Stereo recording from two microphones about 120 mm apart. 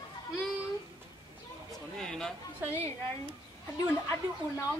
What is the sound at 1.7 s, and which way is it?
Speech, 5° left (ahead or behind).